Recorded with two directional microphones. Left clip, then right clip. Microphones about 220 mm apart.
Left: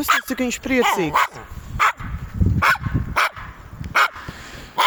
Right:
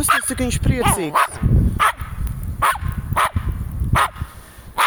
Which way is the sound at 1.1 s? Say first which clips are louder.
Right 1 dB; 45° left (ahead or behind).